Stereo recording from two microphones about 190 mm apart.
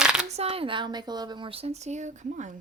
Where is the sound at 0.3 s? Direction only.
35° right (ahead or behind).